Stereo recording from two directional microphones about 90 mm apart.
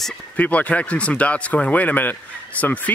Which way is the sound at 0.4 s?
15° left (ahead or behind).